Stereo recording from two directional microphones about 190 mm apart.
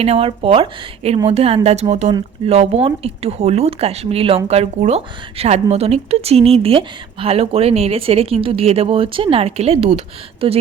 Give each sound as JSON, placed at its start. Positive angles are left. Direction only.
{"t": 0.0, "sound": "a woman's voice", "side_deg": -30}